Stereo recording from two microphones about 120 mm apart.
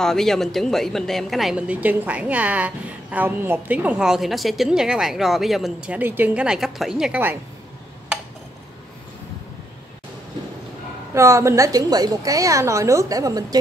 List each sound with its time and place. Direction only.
0.0 s speech: 5° left (ahead or behind)
1.7 s a woman's voice: 10° right (ahead or behind)
11.1 s a woman's voice: 25° right (ahead or behind)